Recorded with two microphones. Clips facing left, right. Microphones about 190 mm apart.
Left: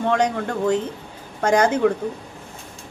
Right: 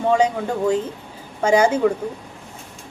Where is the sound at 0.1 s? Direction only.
10° right (ahead or behind).